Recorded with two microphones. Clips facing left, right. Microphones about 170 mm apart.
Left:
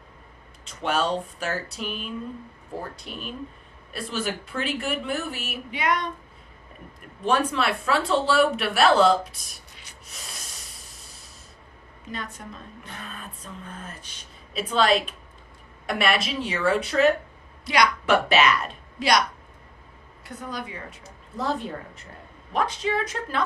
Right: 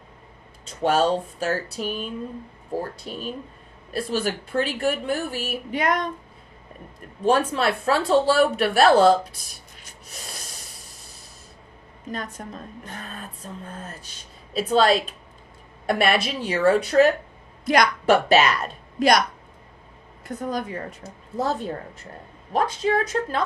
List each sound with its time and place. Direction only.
0.8 s speech: 35° right (ahead or behind)
3.1 s speech: 35° right (ahead or behind)
7.3 s speech: 40° right (ahead or behind)
12.1 s a woman's voice: 45° right (ahead or behind)
15.9 s a woman's voice: 50° right (ahead or behind)
16.5 s a woman's voice: 40° right (ahead or behind)
20.2 s a woman's voice: 45° right (ahead or behind)
22.5 s a woman's voice: 40° right (ahead or behind)